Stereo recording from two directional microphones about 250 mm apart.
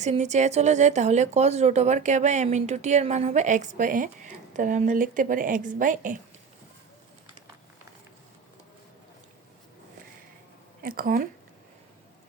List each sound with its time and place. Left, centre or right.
0.0 s speech: right
10.8 s speech: right